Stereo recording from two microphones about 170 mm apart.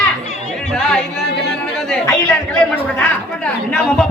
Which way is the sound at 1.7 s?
5° left (ahead or behind).